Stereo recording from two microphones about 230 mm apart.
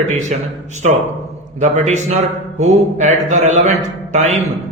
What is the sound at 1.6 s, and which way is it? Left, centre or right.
A man's voice, right.